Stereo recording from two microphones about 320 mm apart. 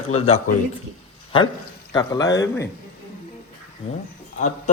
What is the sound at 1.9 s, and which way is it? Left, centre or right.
Speech, centre.